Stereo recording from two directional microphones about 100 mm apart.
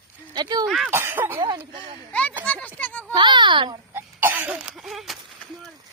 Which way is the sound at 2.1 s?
15° left (ahead or behind).